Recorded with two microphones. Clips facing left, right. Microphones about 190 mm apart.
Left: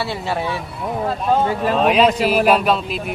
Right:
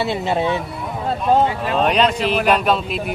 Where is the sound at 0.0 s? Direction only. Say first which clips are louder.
Right 3 dB; 20° right (ahead or behind).